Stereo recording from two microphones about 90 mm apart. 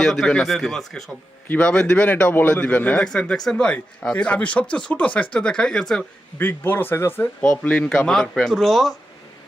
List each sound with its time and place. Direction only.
0.0 s speech: 5° left (ahead or behind)
1.5 s a man's voice: 15° left (ahead or behind)
3.1 s a man's voice: 5° left (ahead or behind)
6.4 s speech: 25° left (ahead or behind)
7.6 s speech: 15° left (ahead or behind)